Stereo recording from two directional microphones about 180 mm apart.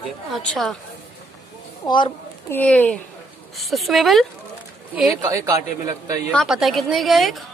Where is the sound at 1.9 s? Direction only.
25° left (ahead or behind).